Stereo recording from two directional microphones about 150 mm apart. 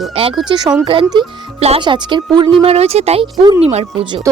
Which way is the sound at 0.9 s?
35° right (ahead or behind).